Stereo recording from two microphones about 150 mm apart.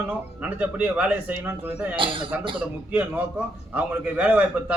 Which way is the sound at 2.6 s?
10° right (ahead or behind).